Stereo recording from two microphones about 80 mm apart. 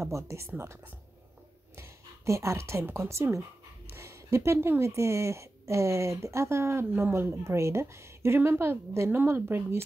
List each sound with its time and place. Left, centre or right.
0.0 s a woman's voice: right